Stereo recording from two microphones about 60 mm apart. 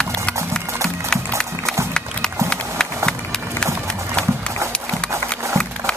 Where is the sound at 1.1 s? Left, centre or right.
Centre.